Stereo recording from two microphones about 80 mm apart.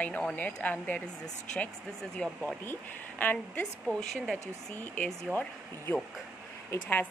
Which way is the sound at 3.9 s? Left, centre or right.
Centre.